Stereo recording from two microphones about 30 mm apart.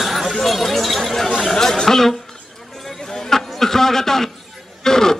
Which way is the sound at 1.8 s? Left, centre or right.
Centre.